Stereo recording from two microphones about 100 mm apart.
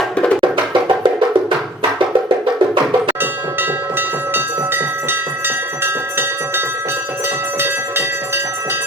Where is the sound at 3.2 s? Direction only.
20° right (ahead or behind).